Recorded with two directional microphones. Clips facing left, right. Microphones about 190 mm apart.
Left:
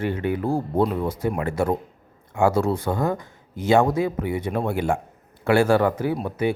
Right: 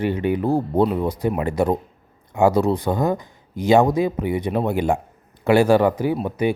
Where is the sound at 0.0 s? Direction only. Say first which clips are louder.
Right 3 dB; 15° right (ahead or behind).